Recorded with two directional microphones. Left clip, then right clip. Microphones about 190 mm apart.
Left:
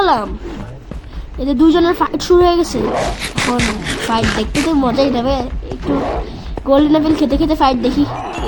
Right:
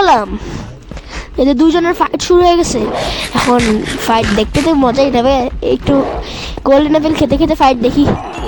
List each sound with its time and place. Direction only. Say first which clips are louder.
0.0 s roaring cats: right 4 dB; 45° right (ahead or behind)
1.4 s speech: right 2 dB; 45° right (ahead or behind)
2.8 s speech: right 1 dB; centre (ahead or behind)
4.7 s speech: right 4 dB; 50° right (ahead or behind)
5.9 s speech: right 1 dB; centre (ahead or behind)
6.7 s speech: right 2 dB; 45° right (ahead or behind)